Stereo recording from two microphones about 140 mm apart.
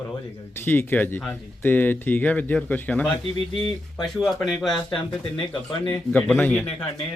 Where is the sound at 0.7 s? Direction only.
15° left (ahead or behind).